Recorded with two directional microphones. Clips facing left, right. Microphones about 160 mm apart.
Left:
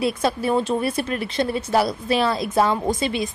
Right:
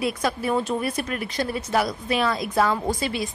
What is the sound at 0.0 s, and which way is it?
Speech, 30° left (ahead or behind).